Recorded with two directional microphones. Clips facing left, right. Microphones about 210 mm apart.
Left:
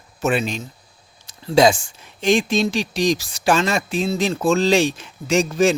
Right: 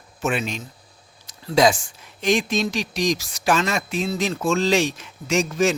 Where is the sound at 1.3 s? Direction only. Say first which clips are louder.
Left 3 dB; 30° left (ahead or behind).